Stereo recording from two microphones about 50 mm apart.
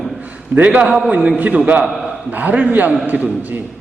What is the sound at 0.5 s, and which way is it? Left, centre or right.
A man's voice, right.